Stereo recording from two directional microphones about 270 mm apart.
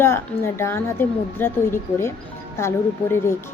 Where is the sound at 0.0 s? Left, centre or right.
Centre.